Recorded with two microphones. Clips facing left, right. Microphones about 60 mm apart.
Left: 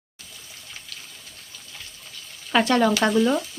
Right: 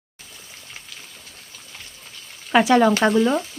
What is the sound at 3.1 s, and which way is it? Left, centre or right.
Speech, right.